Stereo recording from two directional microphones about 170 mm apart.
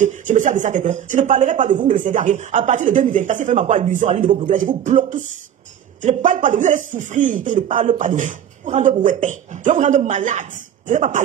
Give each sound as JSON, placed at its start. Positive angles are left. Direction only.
{"t": 0.0, "sound": "speech", "side_deg": -45}